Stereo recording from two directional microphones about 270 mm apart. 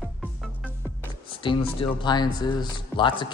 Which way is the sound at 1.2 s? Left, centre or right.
Centre.